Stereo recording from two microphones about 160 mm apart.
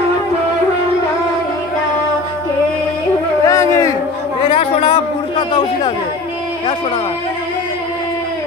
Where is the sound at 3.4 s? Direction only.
20° left (ahead or behind).